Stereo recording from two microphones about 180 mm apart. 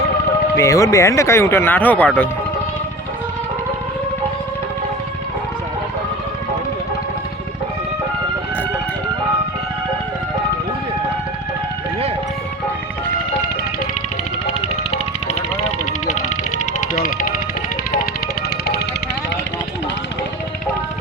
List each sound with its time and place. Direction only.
0.5 s speech: 15° left (ahead or behind)